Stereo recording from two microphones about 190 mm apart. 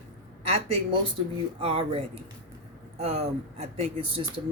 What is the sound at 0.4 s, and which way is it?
Speech, 30° right (ahead or behind).